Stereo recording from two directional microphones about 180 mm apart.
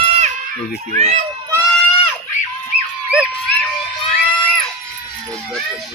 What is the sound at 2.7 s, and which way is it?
Music, 55° right (ahead or behind).